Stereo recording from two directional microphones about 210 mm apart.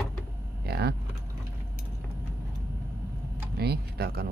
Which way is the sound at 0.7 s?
50° right (ahead or behind).